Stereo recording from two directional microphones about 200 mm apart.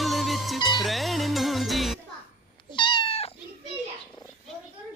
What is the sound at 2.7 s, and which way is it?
Cat, 25° left (ahead or behind).